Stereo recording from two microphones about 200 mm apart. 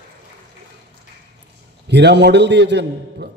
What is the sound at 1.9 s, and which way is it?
A man's voice, 55° right (ahead or behind).